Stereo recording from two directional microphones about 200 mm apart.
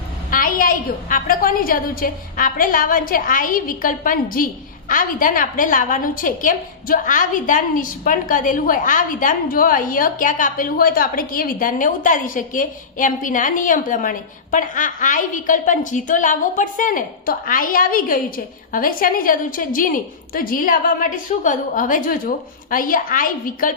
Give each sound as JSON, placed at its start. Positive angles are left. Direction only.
{"t": 0.3, "sound": "a woman's voice", "side_deg": 45}